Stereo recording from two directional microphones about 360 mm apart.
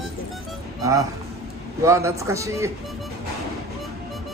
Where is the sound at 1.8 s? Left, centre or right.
Centre.